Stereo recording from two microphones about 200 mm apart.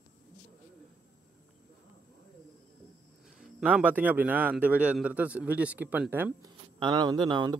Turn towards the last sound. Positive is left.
turn(degrees=-20)  # may be behind; listen again after turning